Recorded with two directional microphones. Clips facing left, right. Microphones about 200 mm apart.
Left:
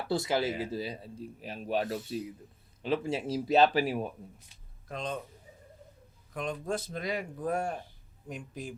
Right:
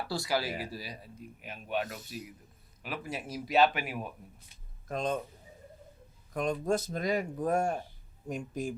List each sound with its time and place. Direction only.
0.1 s speech: 20° left (ahead or behind)
4.9 s speech: 45° right (ahead or behind)
6.3 s speech: 45° right (ahead or behind)